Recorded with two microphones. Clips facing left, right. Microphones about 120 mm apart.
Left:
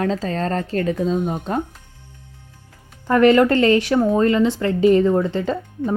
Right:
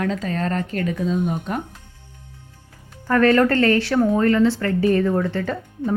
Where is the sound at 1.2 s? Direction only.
50° left (ahead or behind).